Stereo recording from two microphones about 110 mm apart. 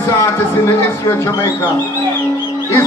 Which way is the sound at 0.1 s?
25° left (ahead or behind).